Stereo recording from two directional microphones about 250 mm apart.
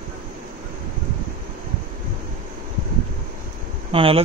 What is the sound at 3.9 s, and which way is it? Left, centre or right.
Speech, right.